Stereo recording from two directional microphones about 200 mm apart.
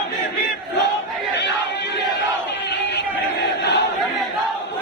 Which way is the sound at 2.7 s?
60° left (ahead or behind).